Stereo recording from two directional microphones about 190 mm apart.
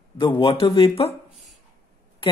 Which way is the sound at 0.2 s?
25° left (ahead or behind).